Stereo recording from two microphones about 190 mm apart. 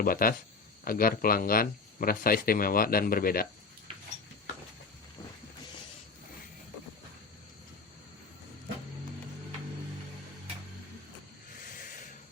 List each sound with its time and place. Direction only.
0.0 s speech: 50° left (ahead or behind)